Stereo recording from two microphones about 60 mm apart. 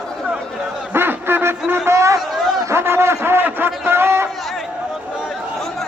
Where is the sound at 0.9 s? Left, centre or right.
Right.